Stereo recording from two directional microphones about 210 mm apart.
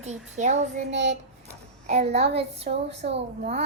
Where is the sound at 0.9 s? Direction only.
55° right (ahead or behind).